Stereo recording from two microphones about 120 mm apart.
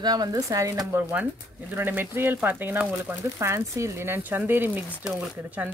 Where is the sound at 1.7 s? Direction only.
15° right (ahead or behind).